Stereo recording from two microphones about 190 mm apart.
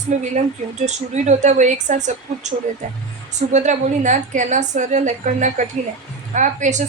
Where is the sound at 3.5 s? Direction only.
40° right (ahead or behind).